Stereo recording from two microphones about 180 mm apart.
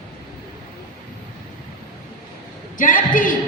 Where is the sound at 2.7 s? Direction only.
50° left (ahead or behind).